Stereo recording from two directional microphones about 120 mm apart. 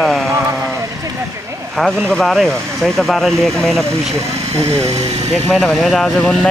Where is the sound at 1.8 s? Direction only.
5° left (ahead or behind).